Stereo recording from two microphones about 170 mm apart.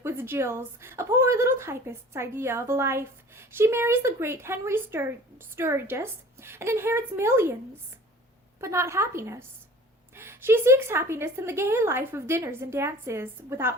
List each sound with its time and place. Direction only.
0.0 s a woman's voice: 15° right (ahead or behind)
8.6 s a woman's voice: 15° right (ahead or behind)